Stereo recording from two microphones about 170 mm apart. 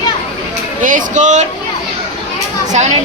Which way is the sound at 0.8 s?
50° right (ahead or behind).